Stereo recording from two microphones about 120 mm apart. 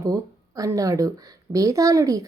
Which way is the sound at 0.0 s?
30° right (ahead or behind).